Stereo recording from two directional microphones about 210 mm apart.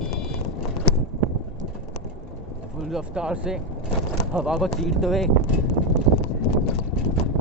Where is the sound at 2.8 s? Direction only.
5° right (ahead or behind).